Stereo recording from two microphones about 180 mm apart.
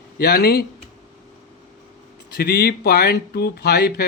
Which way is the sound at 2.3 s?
60° left (ahead or behind).